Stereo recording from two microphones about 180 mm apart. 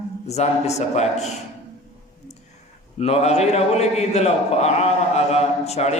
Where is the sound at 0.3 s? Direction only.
40° left (ahead or behind).